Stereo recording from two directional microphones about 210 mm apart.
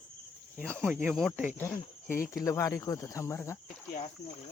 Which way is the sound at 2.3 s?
15° left (ahead or behind).